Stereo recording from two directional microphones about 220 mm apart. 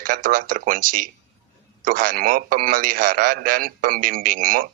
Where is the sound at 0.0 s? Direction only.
40° right (ahead or behind).